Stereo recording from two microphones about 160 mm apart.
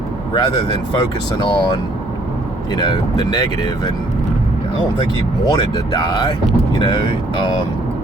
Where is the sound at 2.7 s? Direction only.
25° left (ahead or behind).